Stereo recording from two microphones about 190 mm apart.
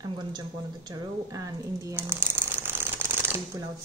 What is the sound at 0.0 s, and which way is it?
Speech, 20° right (ahead or behind).